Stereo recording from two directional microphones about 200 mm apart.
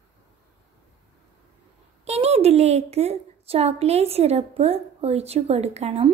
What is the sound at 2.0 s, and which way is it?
A woman's voice, 30° right (ahead or behind).